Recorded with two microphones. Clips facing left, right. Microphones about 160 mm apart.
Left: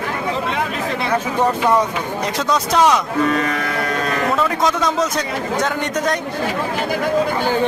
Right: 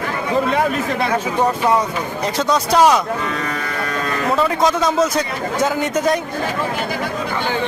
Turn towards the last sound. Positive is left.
turn(degrees=-5)  # may be behind; listen again after turning